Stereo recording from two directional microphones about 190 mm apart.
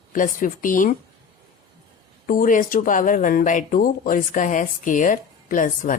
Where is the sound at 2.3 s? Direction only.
45° left (ahead or behind).